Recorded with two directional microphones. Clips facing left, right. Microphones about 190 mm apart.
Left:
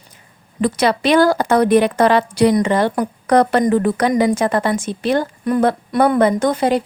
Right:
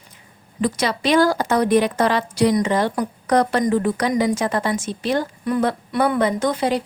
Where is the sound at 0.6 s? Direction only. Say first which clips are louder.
Left 5 dB; 60° left (ahead or behind).